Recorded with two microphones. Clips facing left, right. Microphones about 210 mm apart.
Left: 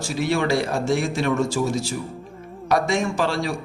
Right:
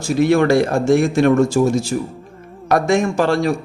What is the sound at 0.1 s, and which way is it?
A man's voice, 55° right (ahead or behind).